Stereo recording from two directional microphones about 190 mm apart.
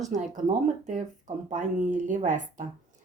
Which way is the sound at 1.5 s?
40° right (ahead or behind).